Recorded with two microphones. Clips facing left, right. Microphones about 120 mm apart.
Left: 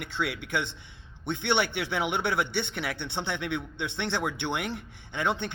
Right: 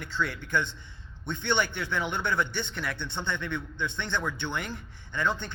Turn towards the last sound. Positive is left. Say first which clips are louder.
# left 1 dB
turn(degrees=65)  # may be behind; listen again after turning